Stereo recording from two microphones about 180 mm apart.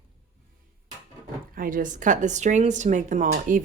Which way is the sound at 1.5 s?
50° right (ahead or behind).